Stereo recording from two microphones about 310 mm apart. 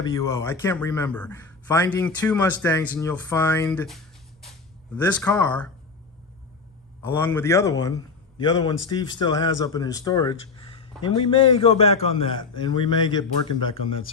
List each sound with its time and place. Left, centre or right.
0.0 s a man's voice: centre
7.0 s a man's voice: centre
10.6 s a sound: centre
11.6 s a man's voice: centre